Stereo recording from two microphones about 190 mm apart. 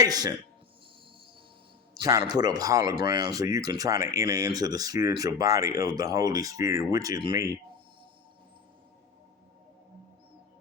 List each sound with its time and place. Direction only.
0.0 s speech: 20° right (ahead or behind)
2.0 s speech: 20° right (ahead or behind)